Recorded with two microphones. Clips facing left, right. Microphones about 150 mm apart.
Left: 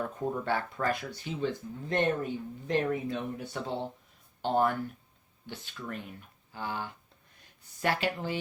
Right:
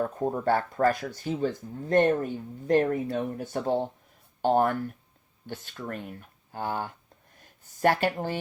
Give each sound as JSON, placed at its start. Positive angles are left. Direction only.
{"t": 0.0, "sound": "speech", "side_deg": -40}